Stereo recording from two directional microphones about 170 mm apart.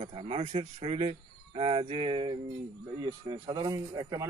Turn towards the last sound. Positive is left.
turn(degrees=-25)  # may be behind; listen again after turning